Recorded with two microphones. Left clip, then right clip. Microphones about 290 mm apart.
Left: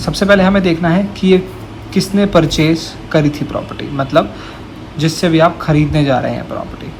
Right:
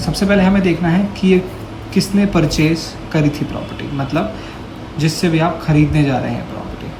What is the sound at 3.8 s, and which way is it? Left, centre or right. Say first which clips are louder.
Speech: left 7 dB; centre.